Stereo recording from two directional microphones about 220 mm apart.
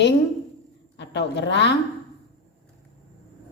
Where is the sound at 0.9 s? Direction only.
50° left (ahead or behind).